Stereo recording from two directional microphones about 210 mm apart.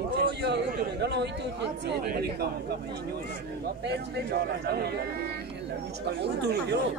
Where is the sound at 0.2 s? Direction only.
55° right (ahead or behind).